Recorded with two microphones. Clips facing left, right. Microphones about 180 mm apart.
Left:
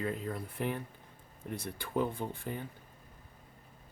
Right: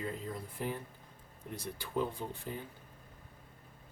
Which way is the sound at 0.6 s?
65° left (ahead or behind).